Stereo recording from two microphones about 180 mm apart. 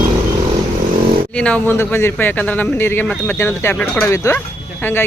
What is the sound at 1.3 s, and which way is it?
Speech, 5° left (ahead or behind).